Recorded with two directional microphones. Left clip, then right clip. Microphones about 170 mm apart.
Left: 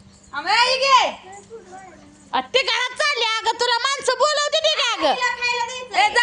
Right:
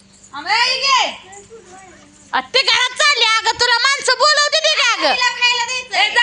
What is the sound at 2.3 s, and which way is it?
Speech, 5° right (ahead or behind).